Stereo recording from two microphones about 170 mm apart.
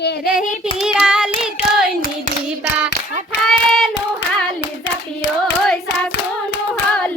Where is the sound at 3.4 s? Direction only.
Centre (ahead or behind).